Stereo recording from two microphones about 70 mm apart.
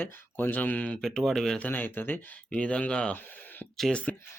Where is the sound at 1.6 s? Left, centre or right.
Left.